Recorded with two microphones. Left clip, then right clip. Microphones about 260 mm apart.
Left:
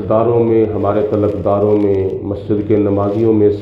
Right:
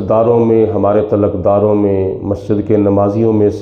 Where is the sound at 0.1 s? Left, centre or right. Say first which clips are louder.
Right 2 dB; right.